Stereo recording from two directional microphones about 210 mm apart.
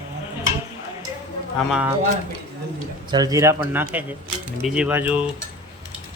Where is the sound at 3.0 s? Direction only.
20° right (ahead or behind).